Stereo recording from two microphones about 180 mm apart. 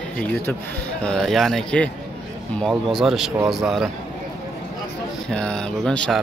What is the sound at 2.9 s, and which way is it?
Speech, centre (ahead or behind).